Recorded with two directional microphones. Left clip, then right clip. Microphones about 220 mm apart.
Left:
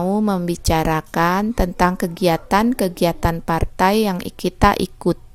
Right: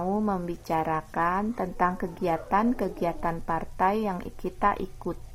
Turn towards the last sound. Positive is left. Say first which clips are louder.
# left 10 dB
turn(degrees=50)  # may be behind; listen again after turning